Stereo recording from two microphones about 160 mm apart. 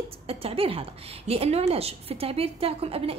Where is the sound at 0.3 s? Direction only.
35° right (ahead or behind).